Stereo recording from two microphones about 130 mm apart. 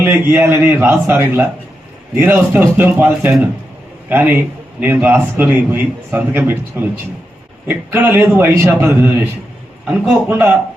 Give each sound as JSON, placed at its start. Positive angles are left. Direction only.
{"t": 0.0, "sound": "a man's voice", "side_deg": -15}
{"t": 3.1, "sound": "a man's voice", "side_deg": -5}
{"t": 4.1, "sound": "a man's voice", "side_deg": -15}
{"t": 10.2, "sound": "a man's voice", "side_deg": -15}